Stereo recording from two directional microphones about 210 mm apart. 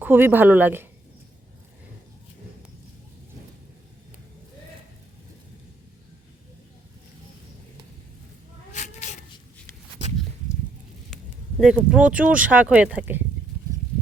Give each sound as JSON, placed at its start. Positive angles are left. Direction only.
{"t": 0.0, "sound": "speech", "side_deg": -10}
{"t": 8.7, "sound": "cat", "side_deg": 35}
{"t": 11.8, "sound": "speech", "side_deg": -5}